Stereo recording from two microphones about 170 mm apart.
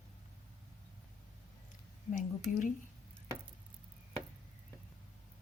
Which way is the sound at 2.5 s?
50° left (ahead or behind).